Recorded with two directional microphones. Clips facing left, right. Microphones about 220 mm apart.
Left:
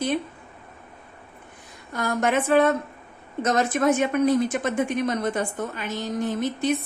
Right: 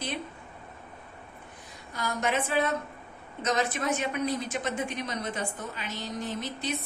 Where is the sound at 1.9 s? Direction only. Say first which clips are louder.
Left 6 dB; 50° left (ahead or behind).